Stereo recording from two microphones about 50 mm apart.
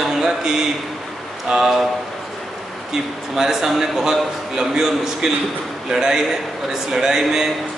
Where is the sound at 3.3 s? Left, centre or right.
Centre.